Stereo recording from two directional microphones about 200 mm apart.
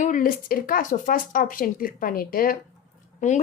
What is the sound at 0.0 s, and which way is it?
A woman's voice, 40° left (ahead or behind).